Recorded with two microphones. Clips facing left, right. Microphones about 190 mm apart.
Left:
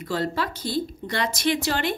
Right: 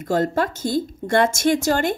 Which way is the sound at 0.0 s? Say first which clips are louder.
Right 6 dB; 45° right (ahead or behind).